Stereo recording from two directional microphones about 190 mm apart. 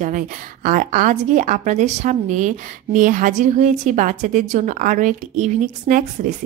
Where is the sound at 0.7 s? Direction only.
45° right (ahead or behind).